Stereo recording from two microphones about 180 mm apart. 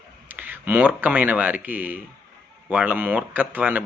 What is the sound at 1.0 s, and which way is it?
Speech, 10° right (ahead or behind).